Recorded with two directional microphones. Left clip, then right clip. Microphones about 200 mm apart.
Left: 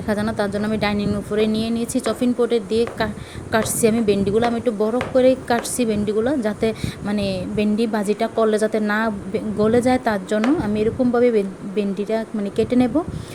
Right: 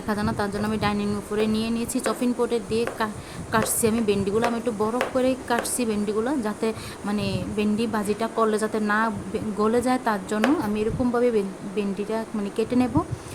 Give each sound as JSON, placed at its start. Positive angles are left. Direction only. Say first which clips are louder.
{"t": 0.1, "sound": "a woman's voice", "louder": "left 5 dB", "side_deg": 15}